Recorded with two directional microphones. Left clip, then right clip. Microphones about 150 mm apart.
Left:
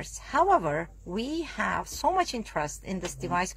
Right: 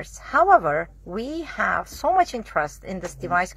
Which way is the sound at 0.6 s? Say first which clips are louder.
Right 7 dB; 35° left (ahead or behind).